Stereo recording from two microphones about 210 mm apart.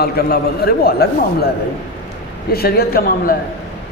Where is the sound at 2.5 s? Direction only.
45° left (ahead or behind).